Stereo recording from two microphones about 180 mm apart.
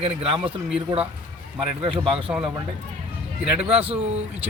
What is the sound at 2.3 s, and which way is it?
Speech, 10° right (ahead or behind).